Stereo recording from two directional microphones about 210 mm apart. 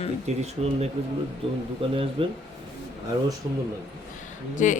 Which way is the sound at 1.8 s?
25° right (ahead or behind).